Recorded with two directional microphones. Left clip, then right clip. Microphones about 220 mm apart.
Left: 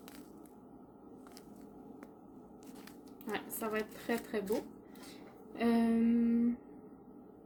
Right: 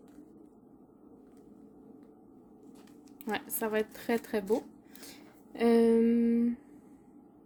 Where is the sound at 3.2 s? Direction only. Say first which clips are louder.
Right 5 dB; 50° right (ahead or behind).